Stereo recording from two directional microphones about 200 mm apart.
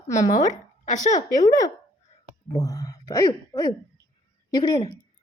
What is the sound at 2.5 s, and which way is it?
Speech, 20° left (ahead or behind).